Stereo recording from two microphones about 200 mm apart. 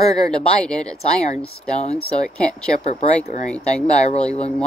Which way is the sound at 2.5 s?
5° left (ahead or behind).